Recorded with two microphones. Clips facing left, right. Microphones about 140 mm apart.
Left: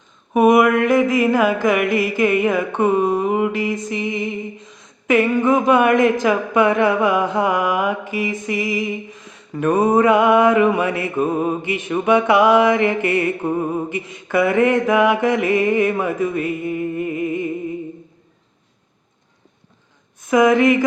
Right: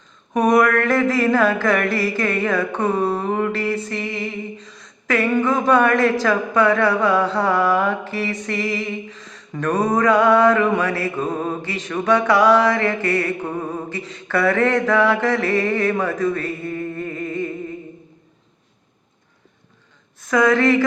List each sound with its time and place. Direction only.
0.4 s mantra: 15° left (ahead or behind)
20.2 s mantra: 20° left (ahead or behind)